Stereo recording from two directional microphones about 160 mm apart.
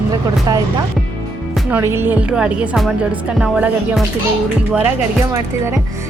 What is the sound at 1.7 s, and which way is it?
A woman's voice, 15° right (ahead or behind).